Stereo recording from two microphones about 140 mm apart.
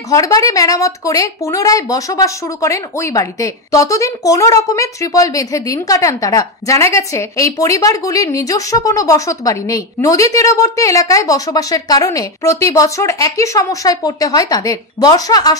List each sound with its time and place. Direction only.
0.1 s a woman's voice: 25° left (ahead or behind)